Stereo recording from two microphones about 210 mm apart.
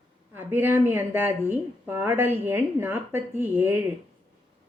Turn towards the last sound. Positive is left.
turn(degrees=-10)  # may be behind; listen again after turning